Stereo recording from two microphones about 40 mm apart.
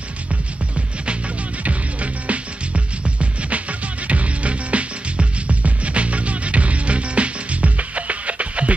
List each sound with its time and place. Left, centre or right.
1.6 s music: right